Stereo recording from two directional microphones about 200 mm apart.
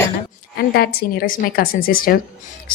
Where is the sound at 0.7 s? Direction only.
50° left (ahead or behind).